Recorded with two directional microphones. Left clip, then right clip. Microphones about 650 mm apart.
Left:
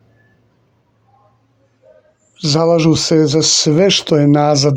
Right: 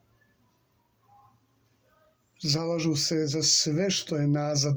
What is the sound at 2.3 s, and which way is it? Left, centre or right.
Speech, centre.